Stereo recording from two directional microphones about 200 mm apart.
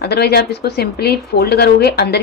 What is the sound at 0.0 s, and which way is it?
A woman's voice, 55° left (ahead or behind).